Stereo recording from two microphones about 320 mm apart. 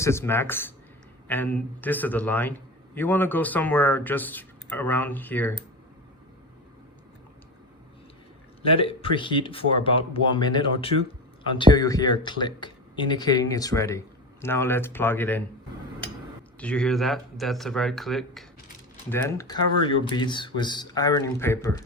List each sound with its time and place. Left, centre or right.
0.0 s a man's voice: centre
8.6 s speech: centre
16.6 s a man's voice: centre